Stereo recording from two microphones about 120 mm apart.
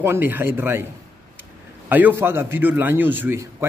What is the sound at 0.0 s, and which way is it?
Speech, 15° right (ahead or behind).